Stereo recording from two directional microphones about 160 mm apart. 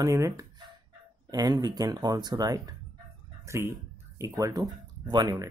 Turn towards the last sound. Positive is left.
turn(degrees=-25)  # may be behind; listen again after turning